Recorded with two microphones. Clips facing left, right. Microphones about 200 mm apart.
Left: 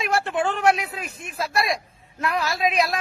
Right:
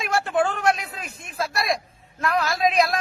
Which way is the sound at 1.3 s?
10° left (ahead or behind).